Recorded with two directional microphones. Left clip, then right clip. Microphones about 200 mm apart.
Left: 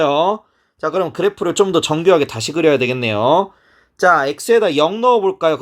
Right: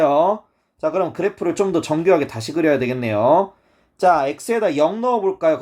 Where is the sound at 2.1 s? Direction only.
50° left (ahead or behind).